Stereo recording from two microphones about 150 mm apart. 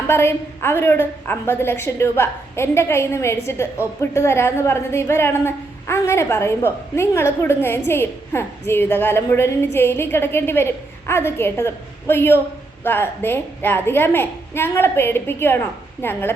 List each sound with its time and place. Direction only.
0.1 s a woman's voice: 15° left (ahead or behind)